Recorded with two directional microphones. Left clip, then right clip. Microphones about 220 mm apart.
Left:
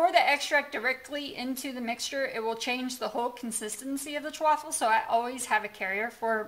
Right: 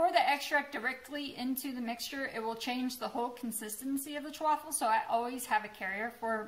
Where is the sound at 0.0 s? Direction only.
35° left (ahead or behind).